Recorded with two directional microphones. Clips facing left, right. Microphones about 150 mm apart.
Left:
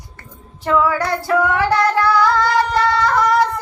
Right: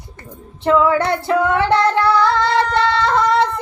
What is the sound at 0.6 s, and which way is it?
Female singing, 25° right (ahead or behind).